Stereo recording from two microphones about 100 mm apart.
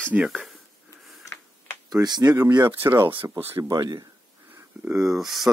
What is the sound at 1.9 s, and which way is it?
Speech, 40° right (ahead or behind).